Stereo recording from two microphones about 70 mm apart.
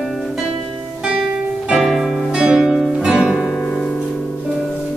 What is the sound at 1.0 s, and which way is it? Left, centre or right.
Music, centre.